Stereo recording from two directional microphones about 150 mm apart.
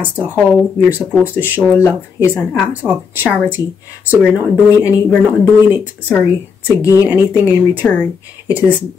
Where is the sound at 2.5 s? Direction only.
Centre (ahead or behind).